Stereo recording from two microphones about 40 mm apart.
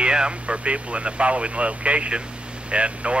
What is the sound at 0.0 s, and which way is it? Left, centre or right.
Speech, right.